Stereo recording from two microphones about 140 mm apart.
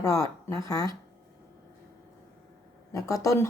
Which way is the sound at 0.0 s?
20° left (ahead or behind).